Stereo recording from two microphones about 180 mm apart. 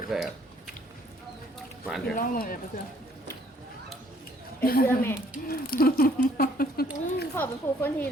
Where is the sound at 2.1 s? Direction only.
50° left (ahead or behind).